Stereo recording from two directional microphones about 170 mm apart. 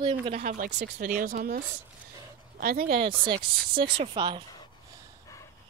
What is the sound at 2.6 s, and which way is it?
Speech, 60° right (ahead or behind).